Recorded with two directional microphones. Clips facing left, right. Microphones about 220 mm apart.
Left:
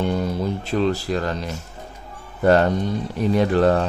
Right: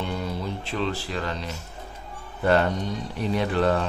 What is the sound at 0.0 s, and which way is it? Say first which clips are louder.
Speech: left 7 dB; 45° left (ahead or behind).